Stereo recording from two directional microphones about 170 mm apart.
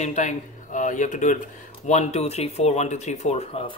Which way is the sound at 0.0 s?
45° left (ahead or behind).